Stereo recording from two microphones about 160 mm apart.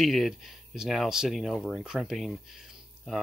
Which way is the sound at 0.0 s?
Centre (ahead or behind).